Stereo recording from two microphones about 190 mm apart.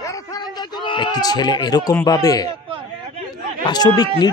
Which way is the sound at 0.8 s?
25° left (ahead or behind).